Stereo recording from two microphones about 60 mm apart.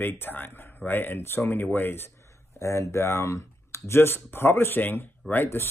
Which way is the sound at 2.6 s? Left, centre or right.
Left.